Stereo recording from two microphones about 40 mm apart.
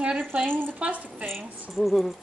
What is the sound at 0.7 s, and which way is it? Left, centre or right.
Speech, right.